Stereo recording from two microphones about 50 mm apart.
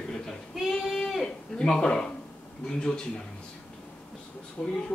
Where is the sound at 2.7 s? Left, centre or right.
Centre.